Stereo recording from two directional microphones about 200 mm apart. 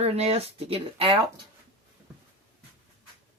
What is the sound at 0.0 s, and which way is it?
Speech, 30° right (ahead or behind).